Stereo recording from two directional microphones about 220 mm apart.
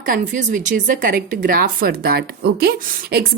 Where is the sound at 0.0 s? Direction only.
35° right (ahead or behind).